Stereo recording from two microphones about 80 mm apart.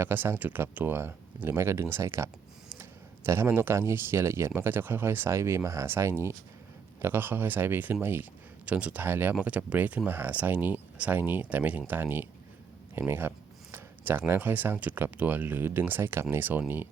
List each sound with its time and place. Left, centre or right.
0.0 s speech: right